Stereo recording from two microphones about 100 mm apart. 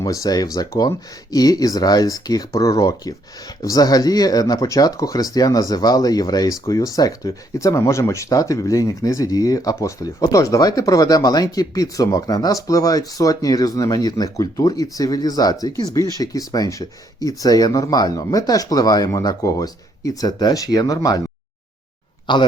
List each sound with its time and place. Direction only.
0.0 s speech: 35° left (ahead or behind)
22.3 s a man's voice: 50° left (ahead or behind)